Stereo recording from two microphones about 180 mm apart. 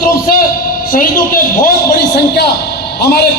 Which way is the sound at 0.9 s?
50° left (ahead or behind).